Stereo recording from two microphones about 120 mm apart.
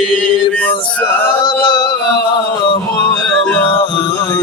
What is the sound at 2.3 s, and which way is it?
Chant, 40° left (ahead or behind).